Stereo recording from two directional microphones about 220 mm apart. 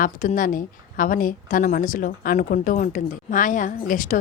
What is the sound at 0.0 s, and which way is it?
Speech, 35° left (ahead or behind).